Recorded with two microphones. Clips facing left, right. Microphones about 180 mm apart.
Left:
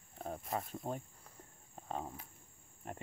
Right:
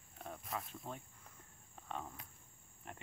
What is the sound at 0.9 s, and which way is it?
Speech, 45° left (ahead or behind).